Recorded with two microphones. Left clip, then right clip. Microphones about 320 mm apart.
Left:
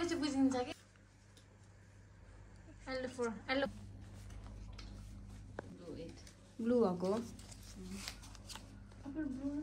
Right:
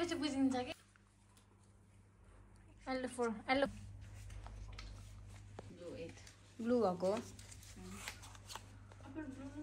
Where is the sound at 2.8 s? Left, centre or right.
Centre.